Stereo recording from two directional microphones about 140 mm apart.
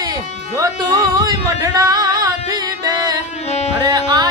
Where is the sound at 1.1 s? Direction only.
25° right (ahead or behind).